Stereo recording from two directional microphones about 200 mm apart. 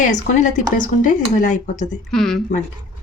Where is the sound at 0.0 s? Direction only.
40° left (ahead or behind).